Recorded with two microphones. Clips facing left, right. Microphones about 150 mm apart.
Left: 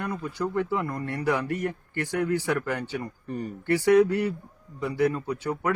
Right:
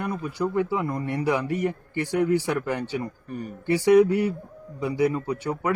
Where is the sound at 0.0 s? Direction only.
15° right (ahead or behind).